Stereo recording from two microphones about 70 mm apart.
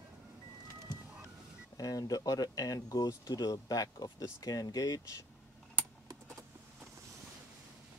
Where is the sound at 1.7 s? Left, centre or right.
Left.